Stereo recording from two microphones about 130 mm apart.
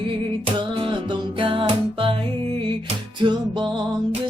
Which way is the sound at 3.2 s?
35° right (ahead or behind).